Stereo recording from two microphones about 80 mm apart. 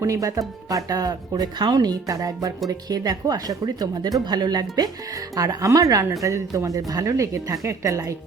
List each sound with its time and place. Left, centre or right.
0.0 s speech: right